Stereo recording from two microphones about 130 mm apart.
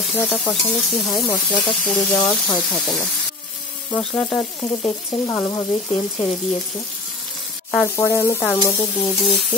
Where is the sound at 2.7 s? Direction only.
Centre (ahead or behind).